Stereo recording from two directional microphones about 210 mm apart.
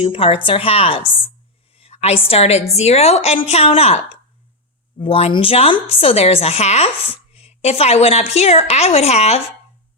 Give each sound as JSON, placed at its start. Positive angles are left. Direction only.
{"t": 0.0, "sound": "a woman's voice", "side_deg": 25}